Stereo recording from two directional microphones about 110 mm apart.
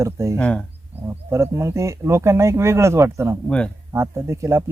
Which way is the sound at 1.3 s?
25° right (ahead or behind).